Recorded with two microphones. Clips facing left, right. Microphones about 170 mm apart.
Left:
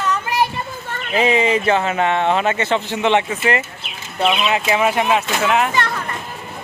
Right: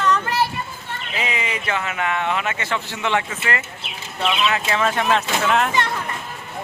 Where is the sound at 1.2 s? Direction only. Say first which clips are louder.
Left 11 dB; 30° left (ahead or behind); by 5.7 s 5° left (ahead or behind).